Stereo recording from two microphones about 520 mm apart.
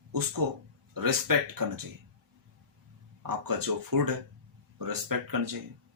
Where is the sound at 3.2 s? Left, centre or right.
Right.